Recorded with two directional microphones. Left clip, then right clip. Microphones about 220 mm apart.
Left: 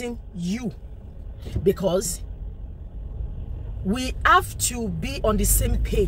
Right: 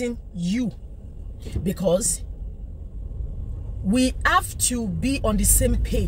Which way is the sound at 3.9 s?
10° right (ahead or behind).